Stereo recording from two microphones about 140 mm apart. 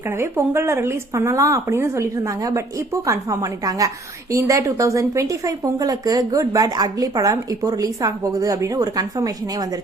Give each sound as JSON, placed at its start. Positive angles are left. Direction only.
{"t": 0.2, "sound": "speech", "side_deg": -15}